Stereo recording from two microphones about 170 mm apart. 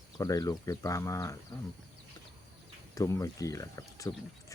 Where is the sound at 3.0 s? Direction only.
20° left (ahead or behind).